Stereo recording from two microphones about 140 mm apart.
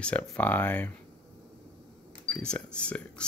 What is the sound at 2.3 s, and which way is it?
Speech, 10° left (ahead or behind).